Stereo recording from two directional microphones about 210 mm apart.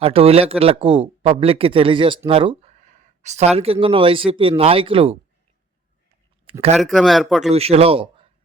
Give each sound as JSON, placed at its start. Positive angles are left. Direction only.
{"t": 0.0, "sound": "a man's voice", "side_deg": -30}
{"t": 6.4, "sound": "a sound", "side_deg": -30}
{"t": 6.7, "sound": "speech", "side_deg": 0}
{"t": 7.5, "sound": "a man's voice", "side_deg": -30}